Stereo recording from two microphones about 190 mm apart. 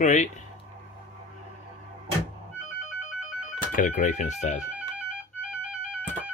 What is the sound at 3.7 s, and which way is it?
Speech, 45° left (ahead or behind).